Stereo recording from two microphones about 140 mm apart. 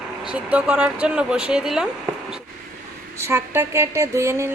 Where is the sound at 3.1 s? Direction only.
20° right (ahead or behind).